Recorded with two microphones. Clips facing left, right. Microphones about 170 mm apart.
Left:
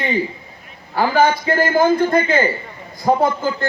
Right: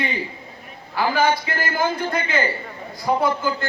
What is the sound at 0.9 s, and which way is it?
A man's voice, 45° left (ahead or behind).